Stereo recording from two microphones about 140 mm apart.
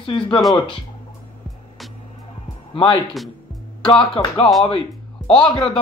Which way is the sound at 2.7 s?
35° left (ahead or behind).